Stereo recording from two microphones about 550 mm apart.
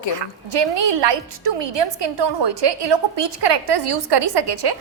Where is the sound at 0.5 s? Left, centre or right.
Right.